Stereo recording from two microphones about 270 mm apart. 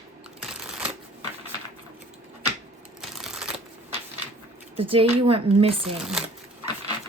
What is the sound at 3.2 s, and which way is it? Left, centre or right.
Shuffling cards, centre.